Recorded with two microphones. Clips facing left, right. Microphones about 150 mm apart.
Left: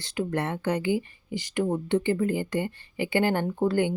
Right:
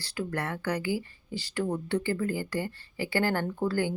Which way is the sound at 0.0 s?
20° left (ahead or behind).